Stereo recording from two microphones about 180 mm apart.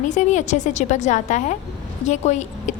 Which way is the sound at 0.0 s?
40° left (ahead or behind).